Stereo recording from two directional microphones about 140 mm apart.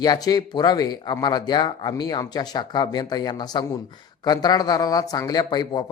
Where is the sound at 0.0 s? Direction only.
30° left (ahead or behind).